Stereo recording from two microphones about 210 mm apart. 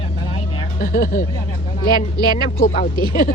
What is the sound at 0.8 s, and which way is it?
Speech, 40° left (ahead or behind).